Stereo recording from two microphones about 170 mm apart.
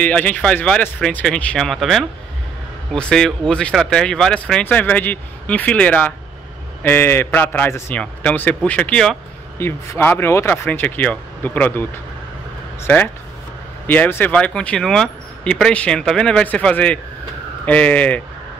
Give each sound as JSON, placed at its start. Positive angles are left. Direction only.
{"t": 0.0, "sound": "speech", "side_deg": 10}